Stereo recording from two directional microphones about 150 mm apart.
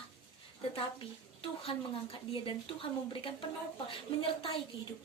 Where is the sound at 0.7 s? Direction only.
40° left (ahead or behind).